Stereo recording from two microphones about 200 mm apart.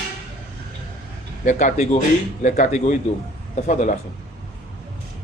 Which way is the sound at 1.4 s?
40° left (ahead or behind).